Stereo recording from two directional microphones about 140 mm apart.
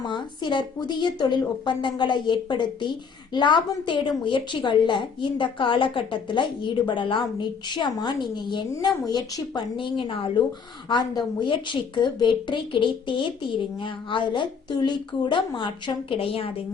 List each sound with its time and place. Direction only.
0.0 s a woman's voice: 35° left (ahead or behind)